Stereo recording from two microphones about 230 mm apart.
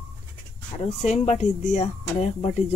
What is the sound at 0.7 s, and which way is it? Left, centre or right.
Speech, left.